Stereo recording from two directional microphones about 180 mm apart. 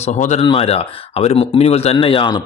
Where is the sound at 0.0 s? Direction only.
40° left (ahead or behind).